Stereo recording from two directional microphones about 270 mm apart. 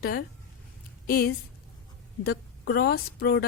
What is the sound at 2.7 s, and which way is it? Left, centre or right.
Speech, left.